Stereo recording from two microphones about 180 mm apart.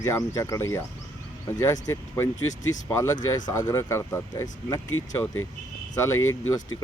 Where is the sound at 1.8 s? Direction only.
15° left (ahead or behind).